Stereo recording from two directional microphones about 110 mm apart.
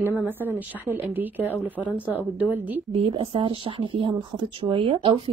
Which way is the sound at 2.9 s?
55° right (ahead or behind).